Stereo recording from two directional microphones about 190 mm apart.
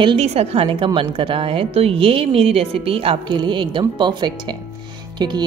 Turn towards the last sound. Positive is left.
turn(degrees=-25)  # may be behind; listen again after turning